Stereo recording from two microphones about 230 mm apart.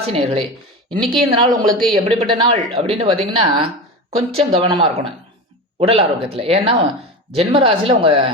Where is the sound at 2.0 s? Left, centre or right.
Right.